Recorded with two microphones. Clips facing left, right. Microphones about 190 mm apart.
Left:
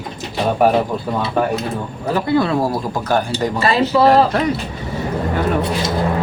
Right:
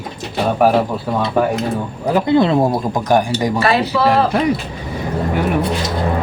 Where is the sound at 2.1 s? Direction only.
20° right (ahead or behind).